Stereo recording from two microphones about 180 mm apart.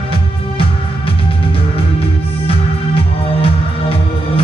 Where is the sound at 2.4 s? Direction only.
30° left (ahead or behind).